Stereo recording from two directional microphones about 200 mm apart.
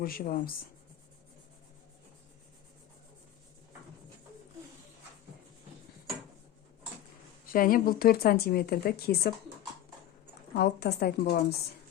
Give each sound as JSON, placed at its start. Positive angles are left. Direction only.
{"t": 0.0, "sound": "a woman's voice", "side_deg": 50}
{"t": 7.4, "sound": "a woman's voice", "side_deg": 45}
{"t": 10.5, "sound": "a woman's voice", "side_deg": 55}